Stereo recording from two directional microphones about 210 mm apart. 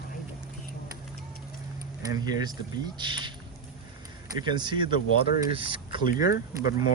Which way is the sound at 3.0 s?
20° right (ahead or behind).